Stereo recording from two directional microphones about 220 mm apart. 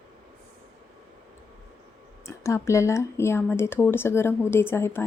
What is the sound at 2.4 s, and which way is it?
Speech, 15° left (ahead or behind).